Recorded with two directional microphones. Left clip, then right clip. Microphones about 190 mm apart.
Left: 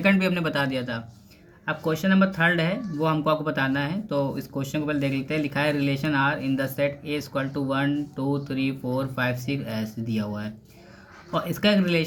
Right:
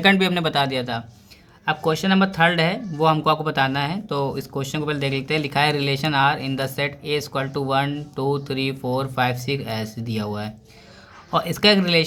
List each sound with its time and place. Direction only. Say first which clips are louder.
0.0 s speech: right 5 dB; 40° right (ahead or behind)